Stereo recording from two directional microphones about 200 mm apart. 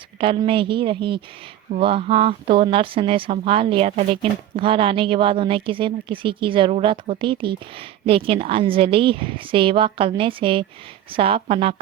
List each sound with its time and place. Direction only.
0.2 s speech: 25° right (ahead or behind)